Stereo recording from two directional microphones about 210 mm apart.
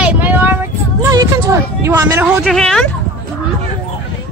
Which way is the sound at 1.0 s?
15° right (ahead or behind).